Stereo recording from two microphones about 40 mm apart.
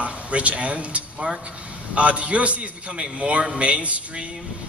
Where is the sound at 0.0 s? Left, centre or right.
Right.